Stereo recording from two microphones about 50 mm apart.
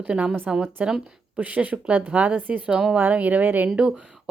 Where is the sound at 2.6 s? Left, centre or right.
Centre.